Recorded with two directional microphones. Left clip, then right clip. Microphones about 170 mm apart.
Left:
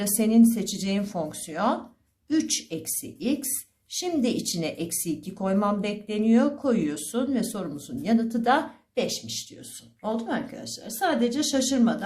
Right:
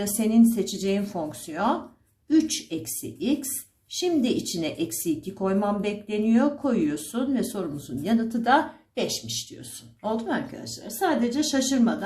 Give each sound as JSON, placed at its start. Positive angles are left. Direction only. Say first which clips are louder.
{"t": 0.0, "sound": "a woman's voice", "louder": "left 1 dB", "side_deg": 30}